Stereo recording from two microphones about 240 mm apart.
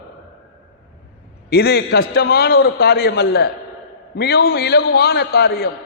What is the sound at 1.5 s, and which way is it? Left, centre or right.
A man's voice, left.